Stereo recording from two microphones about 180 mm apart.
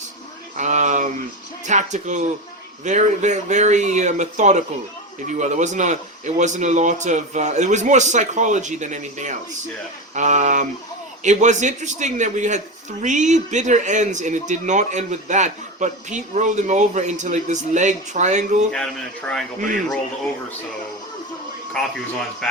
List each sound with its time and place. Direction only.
0.5 s speech: 40° right (ahead or behind)
18.7 s speech: 5° left (ahead or behind)
21.8 s speech: 5° left (ahead or behind)